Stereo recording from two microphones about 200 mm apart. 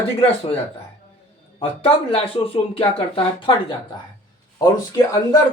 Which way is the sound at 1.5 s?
30° left (ahead or behind).